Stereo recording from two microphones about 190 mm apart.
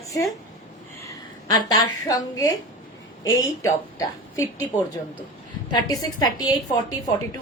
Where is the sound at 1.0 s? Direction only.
15° left (ahead or behind).